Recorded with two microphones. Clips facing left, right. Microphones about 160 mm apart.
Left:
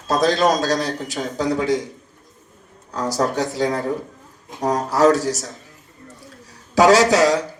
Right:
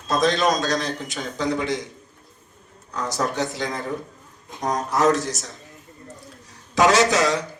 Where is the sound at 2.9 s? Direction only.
35° left (ahead or behind).